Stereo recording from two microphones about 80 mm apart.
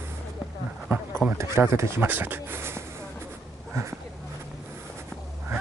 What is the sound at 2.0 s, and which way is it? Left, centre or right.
Speech, right.